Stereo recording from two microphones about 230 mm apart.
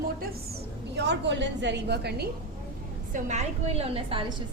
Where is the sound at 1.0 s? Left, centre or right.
Right.